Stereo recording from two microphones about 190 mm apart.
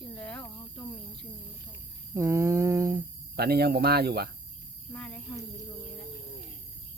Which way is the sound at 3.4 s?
55° right (ahead or behind).